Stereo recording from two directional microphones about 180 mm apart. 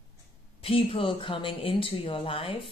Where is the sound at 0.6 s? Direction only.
30° left (ahead or behind).